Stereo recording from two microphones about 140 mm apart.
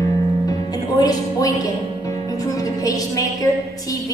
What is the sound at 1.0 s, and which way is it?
A woman's voice, 25° left (ahead or behind).